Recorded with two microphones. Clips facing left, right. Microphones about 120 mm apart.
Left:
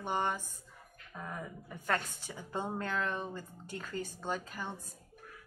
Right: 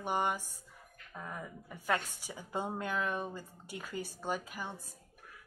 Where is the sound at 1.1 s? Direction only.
Centre (ahead or behind).